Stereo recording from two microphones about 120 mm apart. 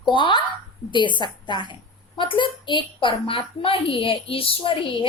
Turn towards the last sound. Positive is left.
turn(degrees=45)  # may be behind; listen again after turning